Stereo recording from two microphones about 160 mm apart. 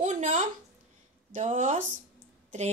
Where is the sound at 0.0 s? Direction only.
50° right (ahead or behind).